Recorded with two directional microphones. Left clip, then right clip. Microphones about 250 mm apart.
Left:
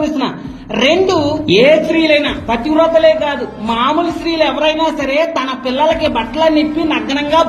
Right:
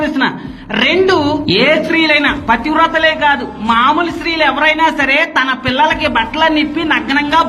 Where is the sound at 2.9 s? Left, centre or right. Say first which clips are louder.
Left 1 dB; right.